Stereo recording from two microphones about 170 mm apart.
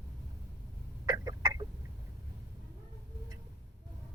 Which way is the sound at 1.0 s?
20° right (ahead or behind).